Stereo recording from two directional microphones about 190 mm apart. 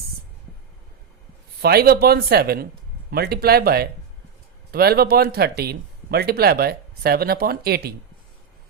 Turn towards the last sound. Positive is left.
turn(degrees=-55)  # may be behind; listen again after turning